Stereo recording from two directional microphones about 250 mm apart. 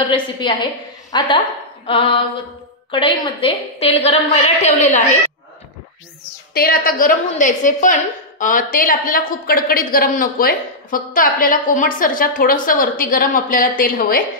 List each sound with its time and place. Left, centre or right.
0.0 s a woman's voice: centre
6.5 s a woman's voice: left